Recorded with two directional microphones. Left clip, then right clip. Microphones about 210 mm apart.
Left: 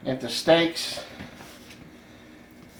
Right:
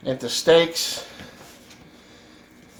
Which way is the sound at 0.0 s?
45° right (ahead or behind).